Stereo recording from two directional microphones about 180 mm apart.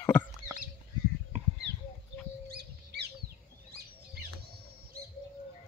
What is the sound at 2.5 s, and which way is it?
Rodents, 65° right (ahead or behind).